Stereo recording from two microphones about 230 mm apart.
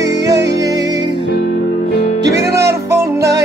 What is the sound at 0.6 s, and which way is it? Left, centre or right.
Music, centre.